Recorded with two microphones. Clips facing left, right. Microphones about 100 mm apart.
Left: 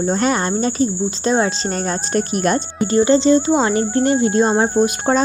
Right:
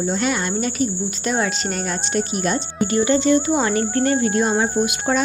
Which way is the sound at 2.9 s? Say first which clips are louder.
Left 4 dB; 30° left (ahead or behind).